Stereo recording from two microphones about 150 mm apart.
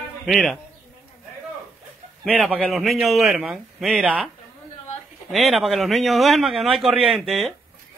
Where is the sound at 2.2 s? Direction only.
5° left (ahead or behind).